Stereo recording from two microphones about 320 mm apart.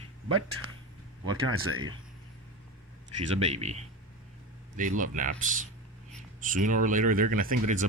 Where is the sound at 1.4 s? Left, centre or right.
Right.